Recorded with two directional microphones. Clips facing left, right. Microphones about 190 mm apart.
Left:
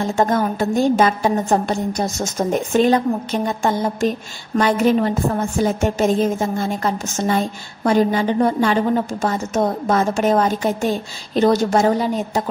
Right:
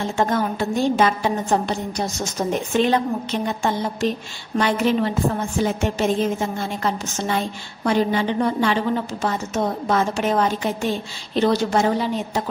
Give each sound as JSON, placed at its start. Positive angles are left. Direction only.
{"t": 0.1, "sound": "a woman's voice", "side_deg": 40}